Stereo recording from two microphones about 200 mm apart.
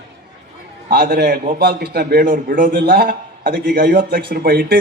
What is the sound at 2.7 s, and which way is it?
A man's voice, 55° right (ahead or behind).